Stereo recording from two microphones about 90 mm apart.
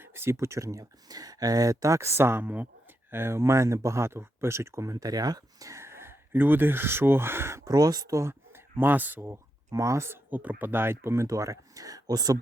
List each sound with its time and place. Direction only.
0.0 s speech: 25° right (ahead or behind)
7.6 s speech: 45° right (ahead or behind); by 9.4 s 20° right (ahead or behind)
9.7 s speech: 35° right (ahead or behind)